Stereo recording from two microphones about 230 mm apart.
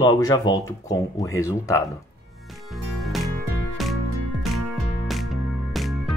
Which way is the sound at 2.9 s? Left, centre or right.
Centre.